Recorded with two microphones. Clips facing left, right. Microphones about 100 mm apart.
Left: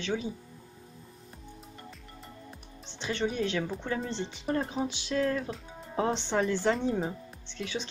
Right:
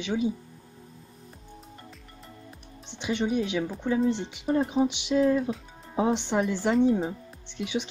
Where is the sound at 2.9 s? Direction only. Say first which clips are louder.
Right 4 dB; 15° right (ahead or behind).